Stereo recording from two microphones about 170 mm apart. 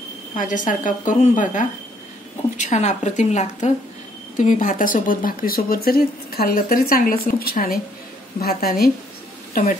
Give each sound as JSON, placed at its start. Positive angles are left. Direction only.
{"t": 0.4, "sound": "a woman's voice", "side_deg": 50}